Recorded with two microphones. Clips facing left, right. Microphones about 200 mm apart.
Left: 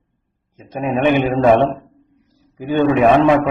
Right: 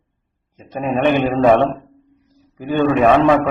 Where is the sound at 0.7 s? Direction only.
15° left (ahead or behind).